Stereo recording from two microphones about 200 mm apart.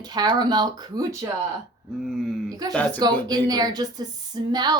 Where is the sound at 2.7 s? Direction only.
5° left (ahead or behind).